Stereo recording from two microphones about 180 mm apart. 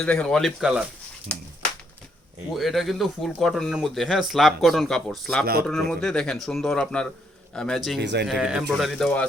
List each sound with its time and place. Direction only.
0.0 s speech: 5° left (ahead or behind)
2.5 s a man's voice: centre (ahead or behind)
8.0 s speech: 70° right (ahead or behind)
8.3 s speech: 5° right (ahead or behind)